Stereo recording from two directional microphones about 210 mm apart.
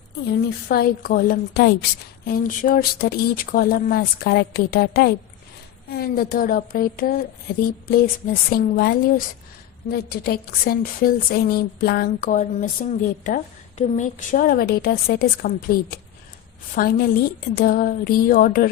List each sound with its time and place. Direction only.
0.3 s a woman's voice: 50° left (ahead or behind)